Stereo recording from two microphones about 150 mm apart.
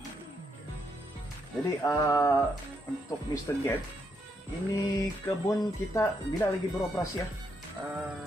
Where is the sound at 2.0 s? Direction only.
20° left (ahead or behind).